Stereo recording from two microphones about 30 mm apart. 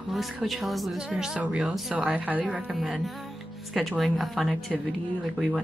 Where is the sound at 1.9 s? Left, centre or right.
Centre.